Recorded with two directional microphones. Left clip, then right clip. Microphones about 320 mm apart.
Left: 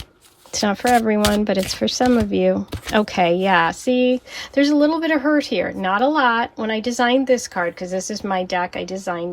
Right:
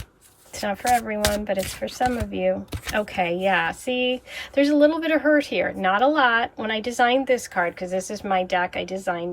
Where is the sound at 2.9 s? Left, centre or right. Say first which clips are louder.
Left 6 dB; centre.